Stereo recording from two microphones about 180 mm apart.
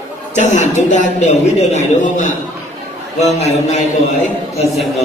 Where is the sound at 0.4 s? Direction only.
40° left (ahead or behind).